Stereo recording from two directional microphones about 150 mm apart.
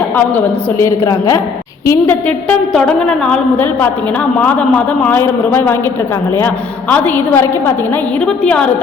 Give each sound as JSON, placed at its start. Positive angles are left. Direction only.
{"t": 0.3, "sound": "a woman's voice", "side_deg": 20}
{"t": 6.9, "sound": "a man's voice", "side_deg": 10}